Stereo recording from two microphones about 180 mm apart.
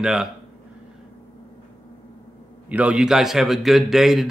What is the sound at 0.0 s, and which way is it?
Speech, 5° right (ahead or behind).